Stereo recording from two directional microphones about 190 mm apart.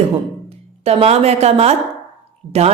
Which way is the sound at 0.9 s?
30° right (ahead or behind).